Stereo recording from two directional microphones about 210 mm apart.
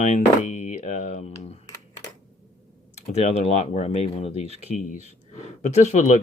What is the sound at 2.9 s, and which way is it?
Speech, 30° left (ahead or behind).